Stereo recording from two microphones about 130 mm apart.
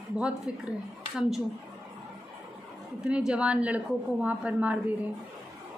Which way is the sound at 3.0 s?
10° right (ahead or behind).